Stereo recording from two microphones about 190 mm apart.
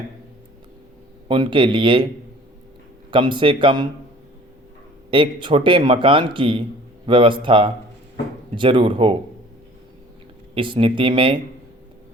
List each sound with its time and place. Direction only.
1.3 s a man's voice: 25° right (ahead or behind)
3.1 s a man's voice: 25° right (ahead or behind)
5.1 s a man's voice: 25° right (ahead or behind)
10.5 s a man's voice: 25° right (ahead or behind)